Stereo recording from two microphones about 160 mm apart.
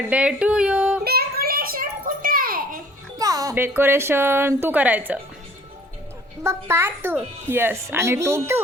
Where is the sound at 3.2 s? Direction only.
20° right (ahead or behind).